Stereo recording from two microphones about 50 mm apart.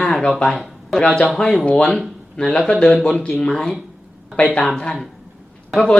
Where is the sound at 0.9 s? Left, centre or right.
Centre.